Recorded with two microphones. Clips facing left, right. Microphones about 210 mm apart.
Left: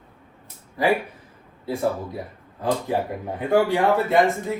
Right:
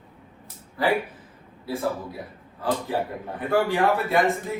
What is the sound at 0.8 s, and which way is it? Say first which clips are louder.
Speech: left 3 dB; 15° left (ahead or behind).